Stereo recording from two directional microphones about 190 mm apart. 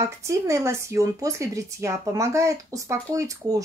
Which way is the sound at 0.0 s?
15° right (ahead or behind).